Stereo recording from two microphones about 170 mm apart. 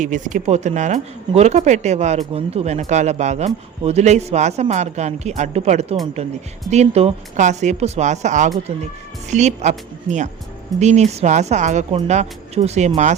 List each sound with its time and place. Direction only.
0.0 s speech: 50° right (ahead or behind)